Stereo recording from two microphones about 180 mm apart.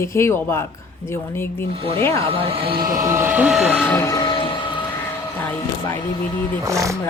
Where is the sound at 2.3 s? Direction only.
30° right (ahead or behind).